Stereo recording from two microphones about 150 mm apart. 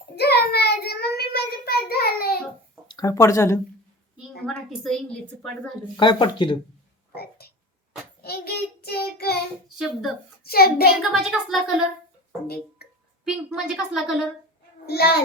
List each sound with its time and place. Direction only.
0.2 s child singing: 90° left
2.8 s speech: 25° left (ahead or behind)
4.4 s a woman's voice: 5° left (ahead or behind)
6.0 s speech: 30° left (ahead or behind)
7.1 s a sound: 90° left
8.2 s child singing: 90° left
9.6 s a child's voice: 5° right (ahead or behind)
10.4 s child singing: 90° left
11.1 s a woman's voice: 5° right (ahead or behind)
12.8 s a sound: 90° left
13.2 s a woman's voice: 5° right (ahead or behind)
14.8 s child singing: 90° left